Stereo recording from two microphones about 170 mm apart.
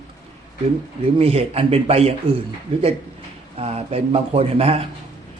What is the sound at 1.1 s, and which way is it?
Speech, 35° right (ahead or behind).